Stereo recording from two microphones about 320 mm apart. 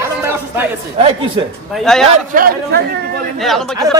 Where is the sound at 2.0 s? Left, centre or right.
Right.